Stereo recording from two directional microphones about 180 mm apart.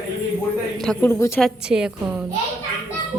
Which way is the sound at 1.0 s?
15° left (ahead or behind).